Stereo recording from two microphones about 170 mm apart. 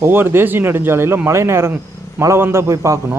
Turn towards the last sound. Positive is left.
turn(degrees=-20)  # may be behind; listen again after turning